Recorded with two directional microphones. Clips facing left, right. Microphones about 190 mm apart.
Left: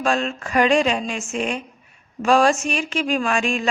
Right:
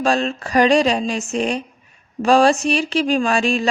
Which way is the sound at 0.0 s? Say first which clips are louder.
Right 3 dB; 35° right (ahead or behind).